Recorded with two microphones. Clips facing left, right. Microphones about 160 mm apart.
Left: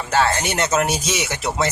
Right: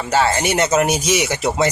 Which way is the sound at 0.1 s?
10° right (ahead or behind).